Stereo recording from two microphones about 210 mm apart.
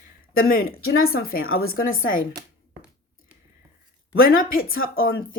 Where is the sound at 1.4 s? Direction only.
80° left.